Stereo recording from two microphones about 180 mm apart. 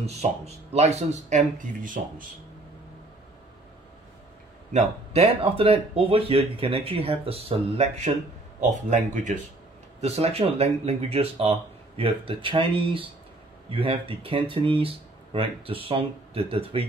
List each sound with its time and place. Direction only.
0.0 s speech: 35° right (ahead or behind)
4.7 s speech: 35° right (ahead or behind)